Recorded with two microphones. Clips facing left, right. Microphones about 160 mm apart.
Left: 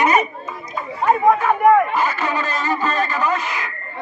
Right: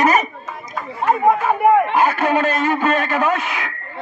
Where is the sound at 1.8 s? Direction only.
55° right (ahead or behind).